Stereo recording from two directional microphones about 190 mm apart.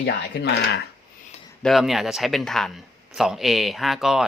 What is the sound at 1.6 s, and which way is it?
Speech, centre (ahead or behind).